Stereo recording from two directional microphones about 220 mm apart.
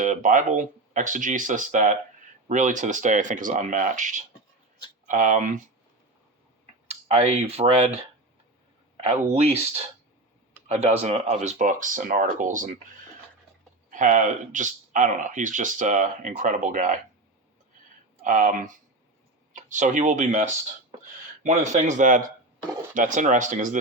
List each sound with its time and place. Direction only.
0.0 s speech: 35° right (ahead or behind)
7.1 s speech: 30° right (ahead or behind)
9.0 s speech: 30° right (ahead or behind)
13.9 s speech: 35° right (ahead or behind)
18.2 s speech: 35° right (ahead or behind)